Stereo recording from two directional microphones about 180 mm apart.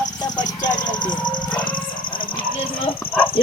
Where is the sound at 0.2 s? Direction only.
20° left (ahead or behind).